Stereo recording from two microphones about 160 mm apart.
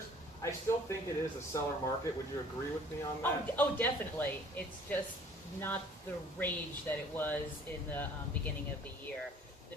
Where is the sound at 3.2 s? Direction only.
10° left (ahead or behind).